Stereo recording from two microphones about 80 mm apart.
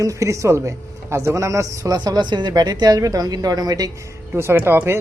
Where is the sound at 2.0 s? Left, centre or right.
Right.